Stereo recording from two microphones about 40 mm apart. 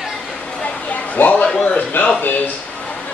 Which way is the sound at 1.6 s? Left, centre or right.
Left.